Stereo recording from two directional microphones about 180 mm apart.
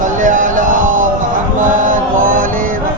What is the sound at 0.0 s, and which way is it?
Music, 45° right (ahead or behind).